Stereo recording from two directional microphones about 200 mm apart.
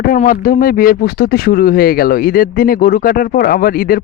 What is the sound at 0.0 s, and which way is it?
Speech, 45° left (ahead or behind).